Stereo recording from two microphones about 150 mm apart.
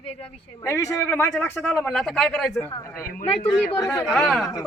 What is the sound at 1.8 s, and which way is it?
Speech, centre (ahead or behind).